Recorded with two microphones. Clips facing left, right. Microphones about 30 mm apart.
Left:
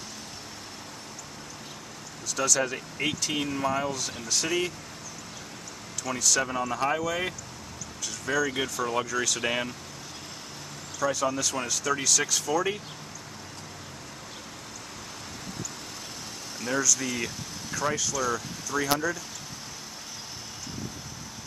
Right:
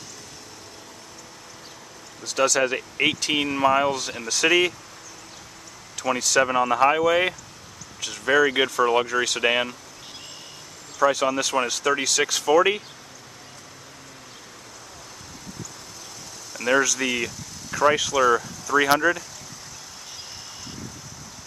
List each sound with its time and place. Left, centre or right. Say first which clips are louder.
2.2 s speech: right 6 dB; right
2.6 s speech: right 7 dB; right
3.9 s speech: right 5 dB; right
4.3 s speech: right 9 dB; right
6.0 s speech: right 6 dB; right
11.1 s speech: right 5 dB; right
16.6 s speech: right 7 dB; right